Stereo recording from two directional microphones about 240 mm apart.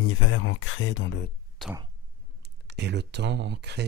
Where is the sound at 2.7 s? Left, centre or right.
Right.